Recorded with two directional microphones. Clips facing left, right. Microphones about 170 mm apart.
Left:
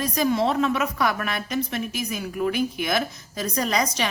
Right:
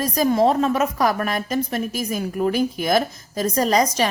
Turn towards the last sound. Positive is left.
turn(degrees=-40)  # may be behind; listen again after turning